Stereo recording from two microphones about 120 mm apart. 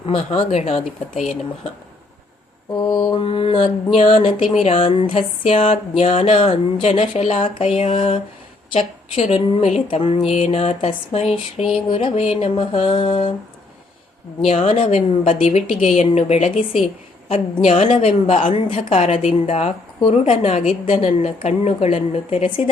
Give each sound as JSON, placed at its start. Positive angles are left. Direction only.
{"t": 0.0, "sound": "a woman's voice", "side_deg": 50}
{"t": 2.9, "sound": "a woman's voice", "side_deg": 40}
{"t": 14.4, "sound": "a woman's voice", "side_deg": 60}
{"t": 20.8, "sound": "speech", "side_deg": 50}
{"t": 21.2, "sound": "a woman's voice", "side_deg": 65}